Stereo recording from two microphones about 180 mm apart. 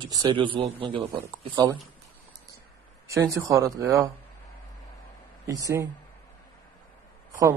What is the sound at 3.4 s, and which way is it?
Speech, 15° right (ahead or behind).